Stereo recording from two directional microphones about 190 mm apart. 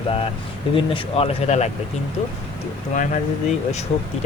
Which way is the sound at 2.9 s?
40° left (ahead or behind).